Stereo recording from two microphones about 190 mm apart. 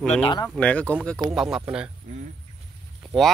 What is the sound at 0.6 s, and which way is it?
Speech, 5° left (ahead or behind).